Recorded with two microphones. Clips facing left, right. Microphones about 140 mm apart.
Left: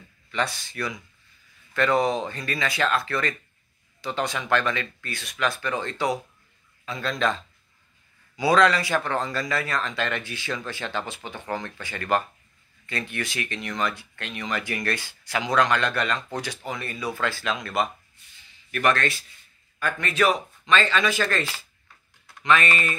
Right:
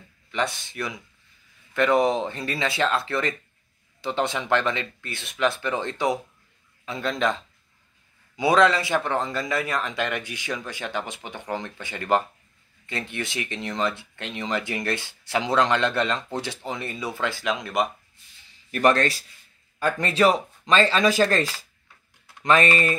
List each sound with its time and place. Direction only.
0.3 s speech: 20° right (ahead or behind)
8.4 s speech: 20° right (ahead or behind)
18.7 s speech: 35° right (ahead or behind)